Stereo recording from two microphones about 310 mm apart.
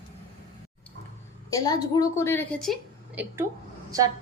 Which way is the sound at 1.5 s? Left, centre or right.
Centre.